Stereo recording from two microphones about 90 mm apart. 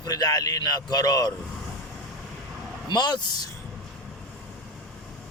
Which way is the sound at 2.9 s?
55° left (ahead or behind).